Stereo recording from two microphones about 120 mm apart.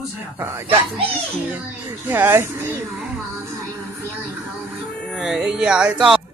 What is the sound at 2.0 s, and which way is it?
Speech, 20° right (ahead or behind).